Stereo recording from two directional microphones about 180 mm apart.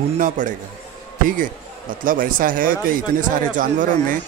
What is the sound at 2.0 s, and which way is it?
Speech, 50° right (ahead or behind).